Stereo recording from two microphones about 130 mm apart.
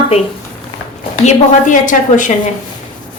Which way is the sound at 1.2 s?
80° left.